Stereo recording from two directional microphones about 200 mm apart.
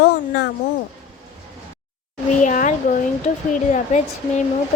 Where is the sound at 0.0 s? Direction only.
55° left (ahead or behind).